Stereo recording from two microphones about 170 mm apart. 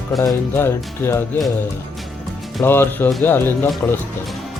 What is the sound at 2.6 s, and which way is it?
Speech, 10° left (ahead or behind).